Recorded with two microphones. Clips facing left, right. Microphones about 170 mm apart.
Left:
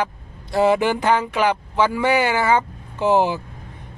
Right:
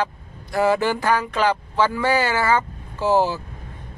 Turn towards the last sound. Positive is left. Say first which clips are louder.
# left 1 dB
turn(degrees=20)  # may be behind; listen again after turning